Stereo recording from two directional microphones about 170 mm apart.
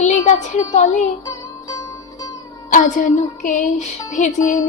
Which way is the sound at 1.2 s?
15° left (ahead or behind).